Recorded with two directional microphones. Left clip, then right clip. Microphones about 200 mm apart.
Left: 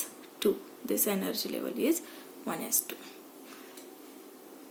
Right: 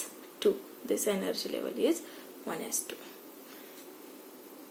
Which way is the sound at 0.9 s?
35° left (ahead or behind).